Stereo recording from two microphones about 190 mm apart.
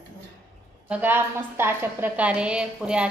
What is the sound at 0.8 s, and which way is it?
A woman's voice, 10° right (ahead or behind).